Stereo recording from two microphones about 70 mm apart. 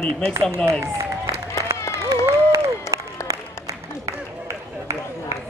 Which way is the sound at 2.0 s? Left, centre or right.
Right.